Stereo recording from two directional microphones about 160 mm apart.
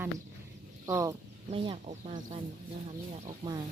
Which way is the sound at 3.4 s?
25° right (ahead or behind).